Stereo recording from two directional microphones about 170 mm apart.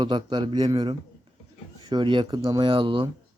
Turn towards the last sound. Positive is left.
turn(degrees=-30)  # may be behind; listen again after turning